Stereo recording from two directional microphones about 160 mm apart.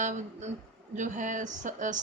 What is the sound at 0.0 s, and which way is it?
Speech, 50° right (ahead or behind).